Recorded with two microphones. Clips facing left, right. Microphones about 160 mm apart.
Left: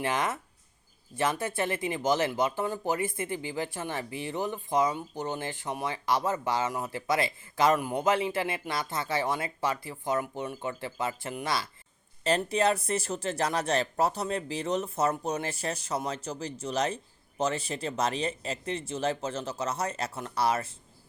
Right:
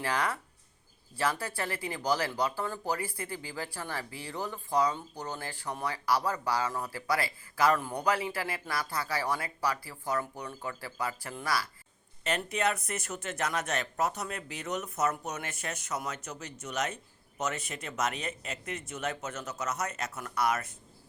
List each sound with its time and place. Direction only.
0.0 s speech: 20° left (ahead or behind)